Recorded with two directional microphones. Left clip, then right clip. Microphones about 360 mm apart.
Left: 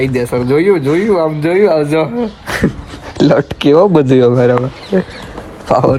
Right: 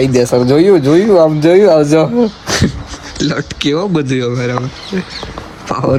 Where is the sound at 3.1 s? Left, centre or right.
Centre.